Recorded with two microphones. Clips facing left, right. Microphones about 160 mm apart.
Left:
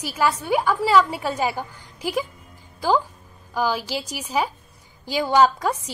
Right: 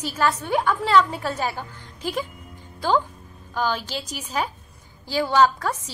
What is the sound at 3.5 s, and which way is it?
A woman's voice, 10° left (ahead or behind).